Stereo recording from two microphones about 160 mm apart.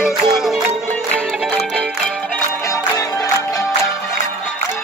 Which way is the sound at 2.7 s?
20° left (ahead or behind).